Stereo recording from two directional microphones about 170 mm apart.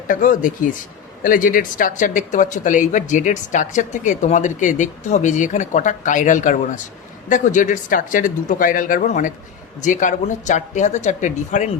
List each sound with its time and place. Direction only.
0.1 s speech: 50° left (ahead or behind)